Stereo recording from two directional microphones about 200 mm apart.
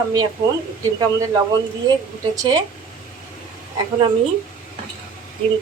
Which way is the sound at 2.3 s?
20° right (ahead or behind).